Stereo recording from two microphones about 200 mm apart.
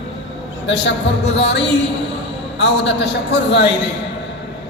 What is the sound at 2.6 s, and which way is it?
A woman's voice, 60° left (ahead or behind).